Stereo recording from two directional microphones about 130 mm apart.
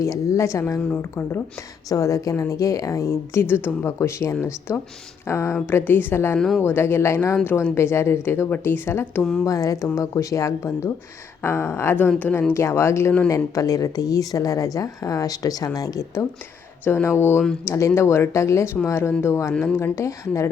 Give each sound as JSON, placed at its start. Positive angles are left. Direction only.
{"t": 0.0, "sound": "a woman's voice", "side_deg": 25}